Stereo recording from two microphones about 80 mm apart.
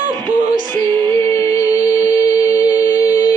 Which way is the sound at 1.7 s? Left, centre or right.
Centre.